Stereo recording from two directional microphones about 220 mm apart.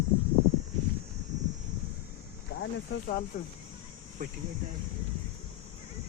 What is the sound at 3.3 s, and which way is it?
Speech, 35° left (ahead or behind).